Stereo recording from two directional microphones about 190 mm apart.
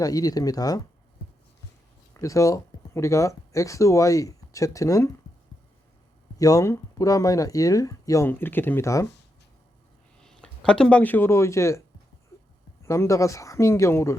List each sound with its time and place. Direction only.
0.0 s speech: 20° left (ahead or behind)
2.1 s speech: 15° left (ahead or behind)
6.4 s speech: 20° left (ahead or behind)
10.2 s speech: 5° left (ahead or behind)
12.8 s speech: 15° left (ahead or behind)